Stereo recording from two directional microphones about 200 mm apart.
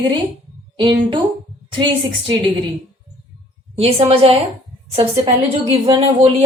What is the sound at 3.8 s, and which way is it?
Speech, 30° right (ahead or behind).